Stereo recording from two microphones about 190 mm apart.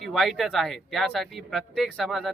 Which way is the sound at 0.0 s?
Centre (ahead or behind).